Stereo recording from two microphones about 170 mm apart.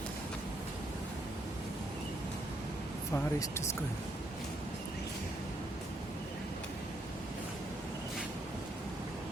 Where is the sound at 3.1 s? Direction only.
15° left (ahead or behind).